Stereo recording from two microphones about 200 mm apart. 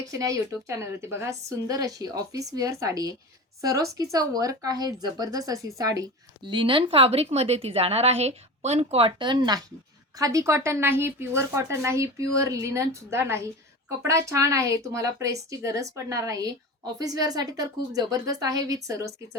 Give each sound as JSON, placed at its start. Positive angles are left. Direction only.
{"t": 0.1, "sound": "speech", "side_deg": -15}